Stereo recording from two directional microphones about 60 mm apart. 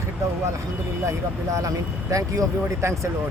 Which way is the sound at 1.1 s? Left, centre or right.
Right.